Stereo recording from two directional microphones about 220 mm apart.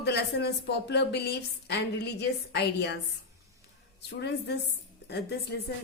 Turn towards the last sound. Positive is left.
turn(degrees=50)  # may be behind; listen again after turning